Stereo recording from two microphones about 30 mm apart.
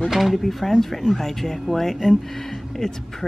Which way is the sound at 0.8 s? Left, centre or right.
Centre.